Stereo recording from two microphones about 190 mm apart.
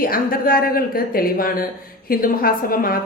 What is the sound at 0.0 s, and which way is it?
A woman's voice, 50° left (ahead or behind).